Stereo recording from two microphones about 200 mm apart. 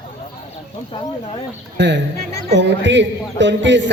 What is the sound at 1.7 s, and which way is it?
A woman's voice, 60° right (ahead or behind).